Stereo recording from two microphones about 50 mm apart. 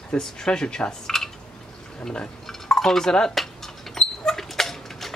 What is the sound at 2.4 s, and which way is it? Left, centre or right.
Dishes, centre.